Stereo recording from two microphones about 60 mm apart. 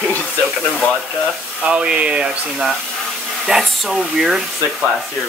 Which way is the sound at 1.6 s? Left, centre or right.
Centre.